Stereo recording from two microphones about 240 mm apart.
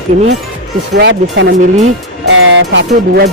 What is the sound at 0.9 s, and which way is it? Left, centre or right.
Speech, right.